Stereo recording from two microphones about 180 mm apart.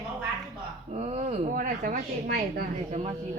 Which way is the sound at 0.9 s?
35° right (ahead or behind).